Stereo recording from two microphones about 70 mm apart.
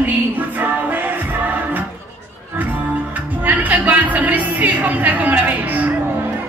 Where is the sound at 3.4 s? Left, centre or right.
Right.